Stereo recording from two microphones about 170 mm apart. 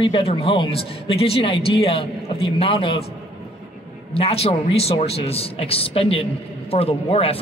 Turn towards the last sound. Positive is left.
turn(degrees=35)  # may be behind; listen again after turning